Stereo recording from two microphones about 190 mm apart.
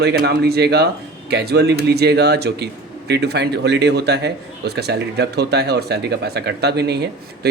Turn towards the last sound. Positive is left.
turn(degrees=-60)  # may be behind; listen again after turning